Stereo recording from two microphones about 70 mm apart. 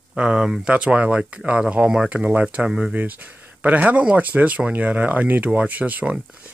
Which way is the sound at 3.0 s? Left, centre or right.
Right.